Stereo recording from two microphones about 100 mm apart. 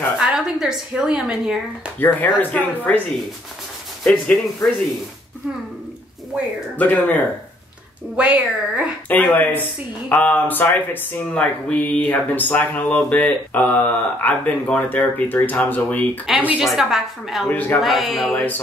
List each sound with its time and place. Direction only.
0.2 s a woman's voice: 5° right (ahead or behind)
2.0 s speech: 20° left (ahead or behind)
4.0 s speech: 10° left (ahead or behind)
6.8 s speech: 15° left (ahead or behind)
8.2 s speech: 15° right (ahead or behind)
9.1 s speech: 15° left (ahead or behind)
16.3 s speech: 15° right (ahead or behind)
16.6 s a woman's voice: centre (ahead or behind)
17.5 s speech: 15° left (ahead or behind)
17.8 s a woman's voice: centre (ahead or behind)
18.3 s a sound: 20° left (ahead or behind)